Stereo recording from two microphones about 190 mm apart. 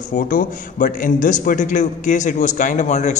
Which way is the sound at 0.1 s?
45° left (ahead or behind).